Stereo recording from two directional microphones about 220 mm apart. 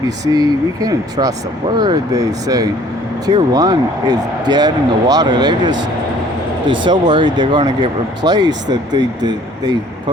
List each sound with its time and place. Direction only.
0.3 s speech: 15° right (ahead or behind)